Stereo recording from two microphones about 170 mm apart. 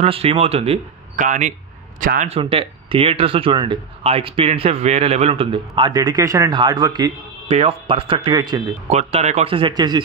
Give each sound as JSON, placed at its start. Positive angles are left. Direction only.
{"t": 0.0, "sound": "a man's voice", "side_deg": -35}
{"t": 2.2, "sound": "speech", "side_deg": -35}
{"t": 7.4, "sound": "speech", "side_deg": -35}
{"t": 8.8, "sound": "speech", "side_deg": -40}